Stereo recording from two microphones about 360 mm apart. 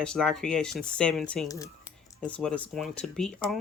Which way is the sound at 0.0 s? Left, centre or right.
Centre.